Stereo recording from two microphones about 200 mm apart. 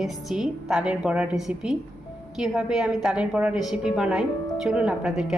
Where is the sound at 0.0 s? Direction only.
5° right (ahead or behind).